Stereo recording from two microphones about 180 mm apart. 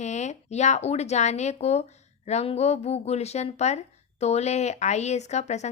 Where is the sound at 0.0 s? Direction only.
40° left (ahead or behind).